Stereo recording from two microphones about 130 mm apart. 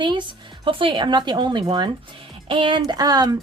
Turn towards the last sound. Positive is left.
turn(degrees=-30)  # may be behind; listen again after turning